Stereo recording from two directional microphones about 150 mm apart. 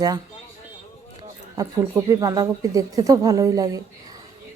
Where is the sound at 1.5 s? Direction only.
20° right (ahead or behind).